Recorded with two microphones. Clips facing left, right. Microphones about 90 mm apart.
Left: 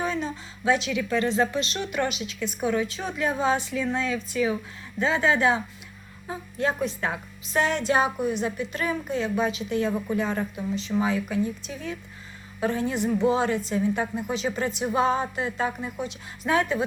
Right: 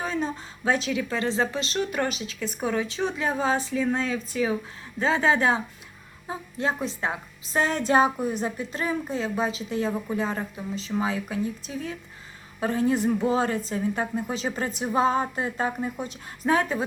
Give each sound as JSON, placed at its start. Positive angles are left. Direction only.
{"t": 0.0, "sound": "a woman's voice", "side_deg": -35}